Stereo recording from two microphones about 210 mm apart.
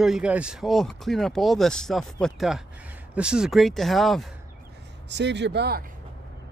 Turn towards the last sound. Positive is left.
turn(degrees=-50)  # may be behind; listen again after turning